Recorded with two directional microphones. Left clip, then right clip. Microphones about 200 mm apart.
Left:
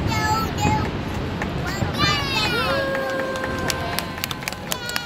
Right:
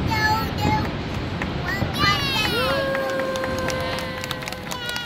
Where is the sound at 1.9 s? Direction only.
20° right (ahead or behind).